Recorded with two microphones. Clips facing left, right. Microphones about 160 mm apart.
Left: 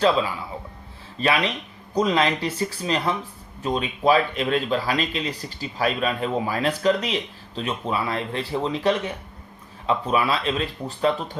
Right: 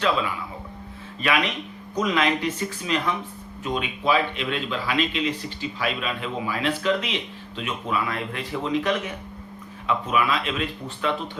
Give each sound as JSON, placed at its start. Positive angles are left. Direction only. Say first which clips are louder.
{"t": 1.2, "sound": "a man's voice", "louder": "left 2 dB", "side_deg": 35}